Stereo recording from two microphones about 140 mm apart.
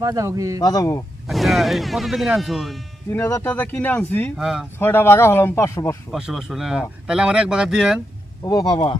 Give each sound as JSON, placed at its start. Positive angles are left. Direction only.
{"t": 0.0, "sound": "speech", "side_deg": -25}
{"t": 0.6, "sound": "speech", "side_deg": 25}
{"t": 1.3, "sound": "speech", "side_deg": 0}
{"t": 3.1, "sound": "speech", "side_deg": 20}
{"t": 4.4, "sound": "speech", "side_deg": -5}
{"t": 4.8, "sound": "speech", "side_deg": 15}
{"t": 6.1, "sound": "speech", "side_deg": -5}
{"t": 8.4, "sound": "speech", "side_deg": 30}